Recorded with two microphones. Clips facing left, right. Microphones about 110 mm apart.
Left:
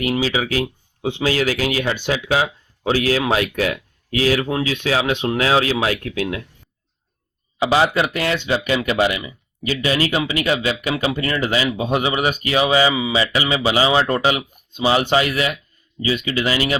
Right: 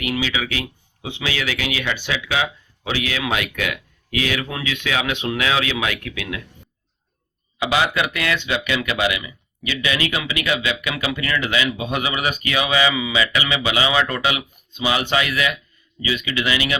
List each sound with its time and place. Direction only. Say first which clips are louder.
0.0 s speech: left 4 dB; 35° left (ahead or behind)
7.6 s speech: left 4 dB; 35° left (ahead or behind)